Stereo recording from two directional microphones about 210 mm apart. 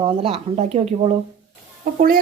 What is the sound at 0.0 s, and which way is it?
A woman's voice, 25° right (ahead or behind).